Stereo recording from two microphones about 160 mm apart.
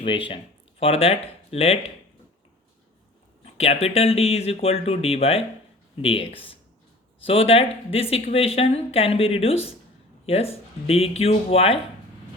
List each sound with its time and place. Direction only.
0.0 s speech: 35° left (ahead or behind)
3.4 s speech: 40° left (ahead or behind)